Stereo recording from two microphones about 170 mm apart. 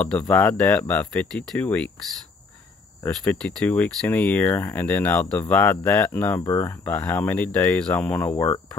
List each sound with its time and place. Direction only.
0.0 s speech: 5° left (ahead or behind)
0.3 s speech: 15° left (ahead or behind)
3.3 s speech: 5° left (ahead or behind)